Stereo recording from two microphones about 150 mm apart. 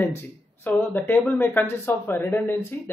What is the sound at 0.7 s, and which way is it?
Speech, 15° left (ahead or behind).